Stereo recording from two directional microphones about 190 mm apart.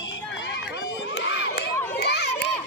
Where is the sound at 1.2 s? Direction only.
70° left (ahead or behind).